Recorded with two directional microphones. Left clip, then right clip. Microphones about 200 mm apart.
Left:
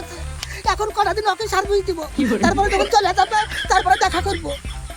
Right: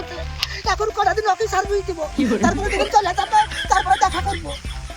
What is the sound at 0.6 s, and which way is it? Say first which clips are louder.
Speech: left 1 dB; 25° left (ahead or behind).